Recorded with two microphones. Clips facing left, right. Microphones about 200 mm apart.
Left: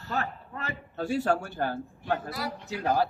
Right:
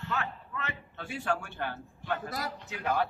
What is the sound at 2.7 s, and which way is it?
Speech, 35° left (ahead or behind).